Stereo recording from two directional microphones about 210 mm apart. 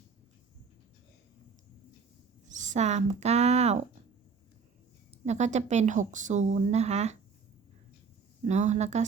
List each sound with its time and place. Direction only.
2.5 s speech: 35° right (ahead or behind)
5.2 s a woman's voice: 35° right (ahead or behind)
8.4 s a woman's voice: 35° right (ahead or behind)